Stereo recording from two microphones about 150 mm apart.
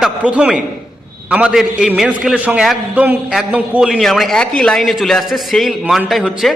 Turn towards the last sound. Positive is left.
turn(degrees=-5)  # may be behind; listen again after turning